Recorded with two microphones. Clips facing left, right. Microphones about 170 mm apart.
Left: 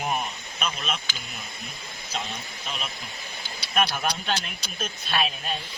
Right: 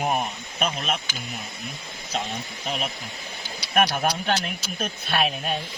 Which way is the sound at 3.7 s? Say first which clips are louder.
Right 4 dB; 50° right (ahead or behind).